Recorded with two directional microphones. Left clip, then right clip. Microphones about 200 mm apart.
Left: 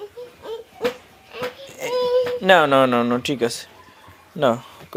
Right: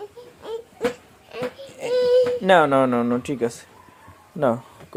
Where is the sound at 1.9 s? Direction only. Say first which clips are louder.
Right 2 dB; 65° right (ahead or behind).